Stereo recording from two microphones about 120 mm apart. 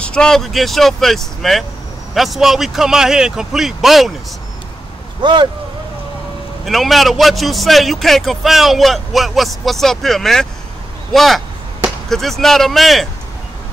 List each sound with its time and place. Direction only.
0.0 s a man's voice: 5° left (ahead or behind)
5.2 s speech: 40° right (ahead or behind)
6.6 s a man's voice: centre (ahead or behind)